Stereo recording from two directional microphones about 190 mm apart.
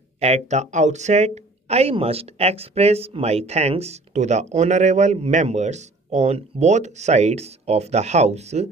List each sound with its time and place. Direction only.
0.2 s speech: 35° right (ahead or behind)